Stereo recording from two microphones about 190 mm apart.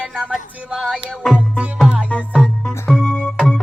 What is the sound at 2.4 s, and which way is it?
Music, 5° left (ahead or behind).